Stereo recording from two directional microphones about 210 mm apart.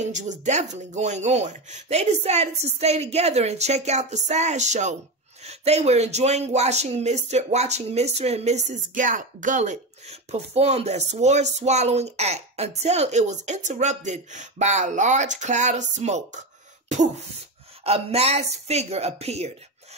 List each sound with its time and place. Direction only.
0.0 s a man's voice: 35° right (ahead or behind)
17.8 s a man's voice: 30° right (ahead or behind)